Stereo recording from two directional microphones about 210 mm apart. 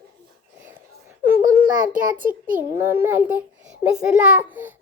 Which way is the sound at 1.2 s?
10° right (ahead or behind).